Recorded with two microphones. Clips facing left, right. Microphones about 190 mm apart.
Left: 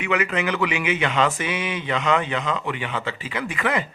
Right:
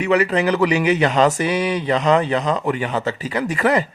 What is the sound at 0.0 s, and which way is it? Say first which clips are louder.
Speech: right 6 dB; 35° right (ahead or behind).